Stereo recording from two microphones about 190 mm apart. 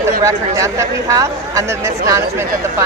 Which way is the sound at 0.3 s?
15° right (ahead or behind).